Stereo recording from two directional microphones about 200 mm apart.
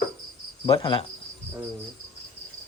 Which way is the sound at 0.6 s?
25° left (ahead or behind).